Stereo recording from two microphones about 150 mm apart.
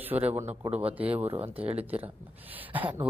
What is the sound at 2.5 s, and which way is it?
Speech, 10° right (ahead or behind).